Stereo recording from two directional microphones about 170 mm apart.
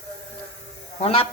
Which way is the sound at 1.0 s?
35° left (ahead or behind).